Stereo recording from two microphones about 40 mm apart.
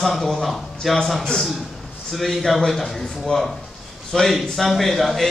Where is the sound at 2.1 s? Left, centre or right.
Centre.